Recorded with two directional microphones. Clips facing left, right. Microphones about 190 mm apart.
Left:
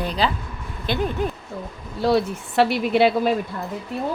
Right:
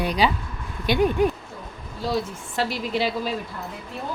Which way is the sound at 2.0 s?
65° left (ahead or behind).